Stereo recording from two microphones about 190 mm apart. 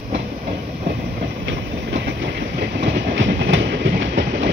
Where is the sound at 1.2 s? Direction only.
70° right (ahead or behind).